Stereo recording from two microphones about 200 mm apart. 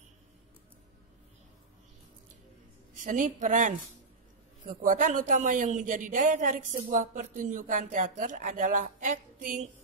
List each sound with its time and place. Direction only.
3.0 s speech: 40° right (ahead or behind)